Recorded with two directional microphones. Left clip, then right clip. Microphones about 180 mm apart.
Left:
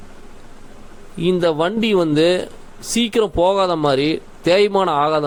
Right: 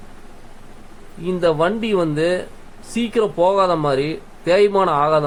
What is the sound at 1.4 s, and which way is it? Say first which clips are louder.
Speech: right 4 dB; 50° left (ahead or behind).